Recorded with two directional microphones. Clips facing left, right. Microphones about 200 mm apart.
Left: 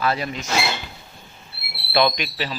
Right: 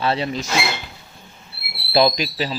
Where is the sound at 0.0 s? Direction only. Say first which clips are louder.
Right 2 dB; 30° right (ahead or behind).